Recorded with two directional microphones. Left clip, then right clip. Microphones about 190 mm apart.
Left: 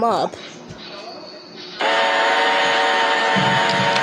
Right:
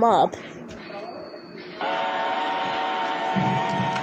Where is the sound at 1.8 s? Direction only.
70° left (ahead or behind).